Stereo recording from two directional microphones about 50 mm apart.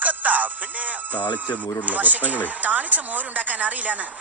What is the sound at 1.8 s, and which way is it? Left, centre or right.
Speech, right.